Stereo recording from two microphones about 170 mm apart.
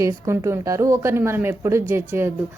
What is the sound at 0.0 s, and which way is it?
A woman's voice, 15° right (ahead or behind).